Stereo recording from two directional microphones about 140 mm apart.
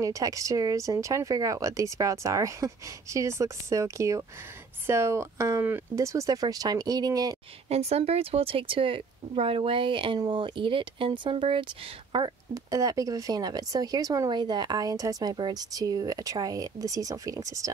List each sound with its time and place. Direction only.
0.0 s speech: 25° right (ahead or behind)
7.7 s speech: 50° right (ahead or behind); by 17.7 s 25° right (ahead or behind)